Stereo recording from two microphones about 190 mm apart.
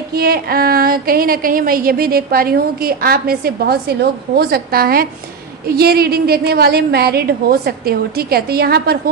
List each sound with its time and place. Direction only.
0.1 s a woman's voice: 55° right (ahead or behind)